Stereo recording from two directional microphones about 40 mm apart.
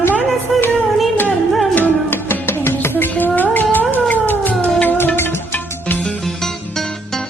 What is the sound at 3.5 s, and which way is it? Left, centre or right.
Music, left.